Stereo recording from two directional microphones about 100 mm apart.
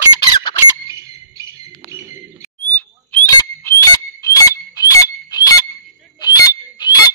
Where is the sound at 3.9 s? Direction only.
35° left (ahead or behind).